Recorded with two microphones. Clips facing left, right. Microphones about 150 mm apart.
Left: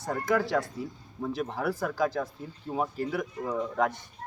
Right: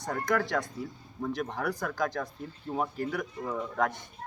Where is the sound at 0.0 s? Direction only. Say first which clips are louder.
Left 2 dB; 5° left (ahead or behind).